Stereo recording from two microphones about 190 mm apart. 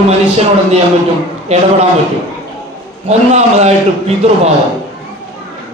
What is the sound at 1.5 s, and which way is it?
Speech, 35° right (ahead or behind).